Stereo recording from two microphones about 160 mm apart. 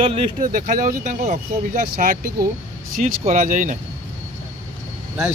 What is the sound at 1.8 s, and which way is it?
Speech, 70° right (ahead or behind).